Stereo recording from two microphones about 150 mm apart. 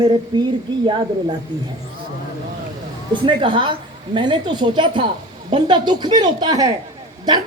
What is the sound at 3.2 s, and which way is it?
A woman's voice, 35° right (ahead or behind).